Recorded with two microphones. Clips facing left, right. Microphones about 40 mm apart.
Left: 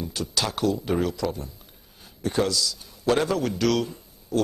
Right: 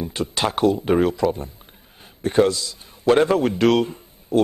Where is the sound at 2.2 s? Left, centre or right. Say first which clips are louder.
Right 6 dB; right.